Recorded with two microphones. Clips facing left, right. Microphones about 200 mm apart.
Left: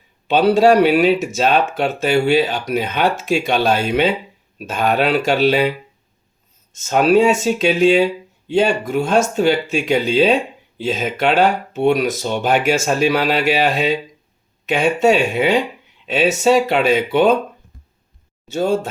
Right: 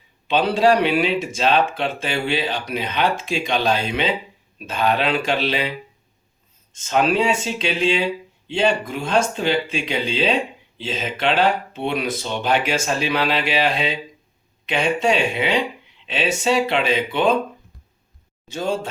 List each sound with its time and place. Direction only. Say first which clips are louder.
0.3 s speech: left 5 dB; 45° left (ahead or behind)
6.7 s speech: left 6 dB; 45° left (ahead or behind)
18.5 s speech: left 6 dB; 45° left (ahead or behind)